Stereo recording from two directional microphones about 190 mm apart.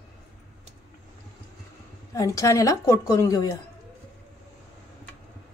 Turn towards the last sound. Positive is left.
turn(degrees=15)  # may be behind; listen again after turning